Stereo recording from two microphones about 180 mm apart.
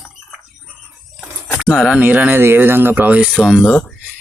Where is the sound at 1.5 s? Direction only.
5° right (ahead or behind).